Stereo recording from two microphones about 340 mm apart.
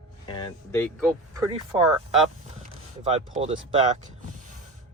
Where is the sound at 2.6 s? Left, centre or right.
Centre.